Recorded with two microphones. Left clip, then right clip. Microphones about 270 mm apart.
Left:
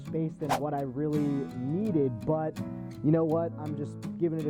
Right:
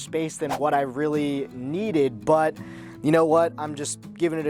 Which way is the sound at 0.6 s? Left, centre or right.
Centre.